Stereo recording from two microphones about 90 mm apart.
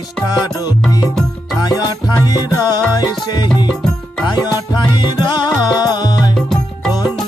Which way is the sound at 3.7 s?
5° left (ahead or behind).